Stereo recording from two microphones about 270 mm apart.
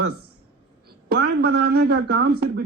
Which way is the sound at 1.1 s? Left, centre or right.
Right.